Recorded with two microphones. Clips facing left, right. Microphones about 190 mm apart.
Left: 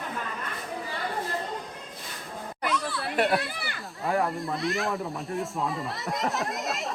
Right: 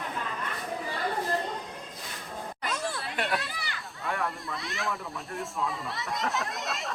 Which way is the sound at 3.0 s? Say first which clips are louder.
Left 6 dB; 45° left (ahead or behind).